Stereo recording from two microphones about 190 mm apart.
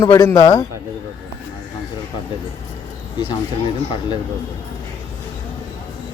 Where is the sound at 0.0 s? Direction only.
20° left (ahead or behind).